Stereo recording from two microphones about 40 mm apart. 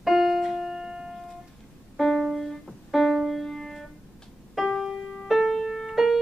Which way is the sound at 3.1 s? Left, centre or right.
Centre.